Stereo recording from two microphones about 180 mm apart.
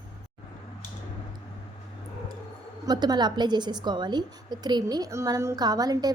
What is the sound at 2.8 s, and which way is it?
A woman's voice, 20° right (ahead or behind).